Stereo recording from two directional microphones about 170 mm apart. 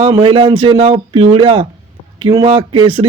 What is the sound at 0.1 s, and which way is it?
A man's voice, 30° right (ahead or behind).